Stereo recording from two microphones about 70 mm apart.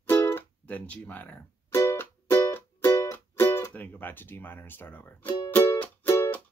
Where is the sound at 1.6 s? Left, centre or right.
Left.